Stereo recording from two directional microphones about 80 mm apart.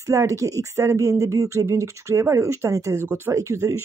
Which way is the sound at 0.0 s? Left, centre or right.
Right.